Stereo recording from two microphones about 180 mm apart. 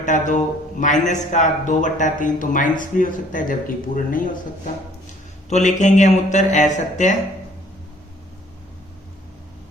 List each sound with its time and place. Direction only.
0.0 s a man's voice: 45° left (ahead or behind)
5.5 s speech: 40° left (ahead or behind)